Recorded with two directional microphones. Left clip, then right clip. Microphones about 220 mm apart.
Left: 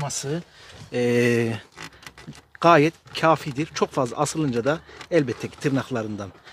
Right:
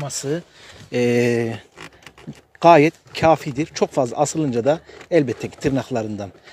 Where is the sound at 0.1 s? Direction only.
30° right (ahead or behind).